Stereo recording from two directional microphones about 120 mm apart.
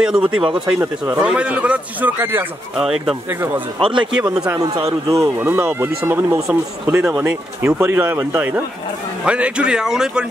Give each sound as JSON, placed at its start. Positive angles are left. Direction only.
{"t": 0.0, "sound": "speech", "side_deg": -5}
{"t": 0.7, "sound": "speech", "side_deg": -20}
{"t": 1.2, "sound": "a man's voice", "side_deg": -10}
{"t": 2.8, "sound": "speech", "side_deg": -5}
{"t": 3.5, "sound": "speech", "side_deg": -45}
{"t": 4.1, "sound": "a man's voice", "side_deg": -5}
{"t": 4.6, "sound": "a man's voice", "side_deg": -30}
{"t": 6.9, "sound": "a man's voice", "side_deg": -5}